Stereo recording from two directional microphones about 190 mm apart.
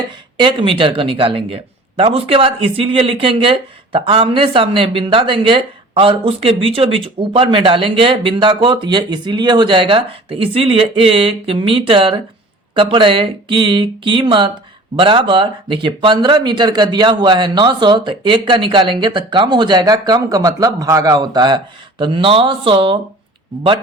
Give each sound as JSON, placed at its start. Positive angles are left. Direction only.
{"t": 0.3, "sound": "speech", "side_deg": -25}